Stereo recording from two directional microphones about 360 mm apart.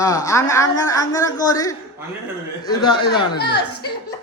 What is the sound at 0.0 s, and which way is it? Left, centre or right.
A man's voice, centre.